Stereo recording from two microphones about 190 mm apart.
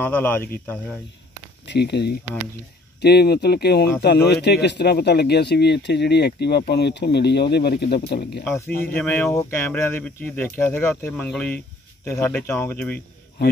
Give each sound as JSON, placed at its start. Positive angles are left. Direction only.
{"t": 0.0, "sound": "speech", "side_deg": 10}
{"t": 1.7, "sound": "speech", "side_deg": 60}
{"t": 8.5, "sound": "speech", "side_deg": 10}